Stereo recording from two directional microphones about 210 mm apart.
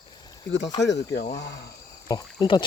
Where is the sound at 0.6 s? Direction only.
20° left (ahead or behind).